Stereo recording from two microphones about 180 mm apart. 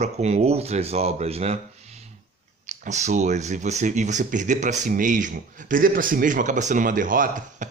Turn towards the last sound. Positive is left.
turn(degrees=-45)  # may be behind; listen again after turning